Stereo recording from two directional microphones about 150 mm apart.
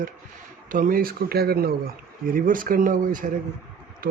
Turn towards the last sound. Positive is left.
turn(degrees=-75)  # may be behind; listen again after turning